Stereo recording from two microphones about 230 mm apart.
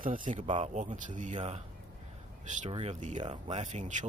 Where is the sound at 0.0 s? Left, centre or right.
Right.